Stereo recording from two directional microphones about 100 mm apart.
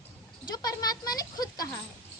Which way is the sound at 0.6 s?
40° left (ahead or behind).